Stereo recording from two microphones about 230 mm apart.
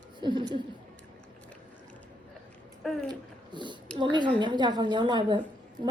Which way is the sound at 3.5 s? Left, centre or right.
Centre.